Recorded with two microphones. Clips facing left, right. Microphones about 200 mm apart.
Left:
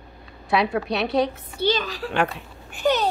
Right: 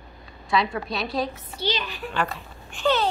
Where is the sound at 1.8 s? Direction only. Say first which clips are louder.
Left 4 dB; 90° left.